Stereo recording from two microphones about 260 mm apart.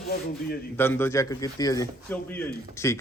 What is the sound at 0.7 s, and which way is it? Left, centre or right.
A man's voice, centre.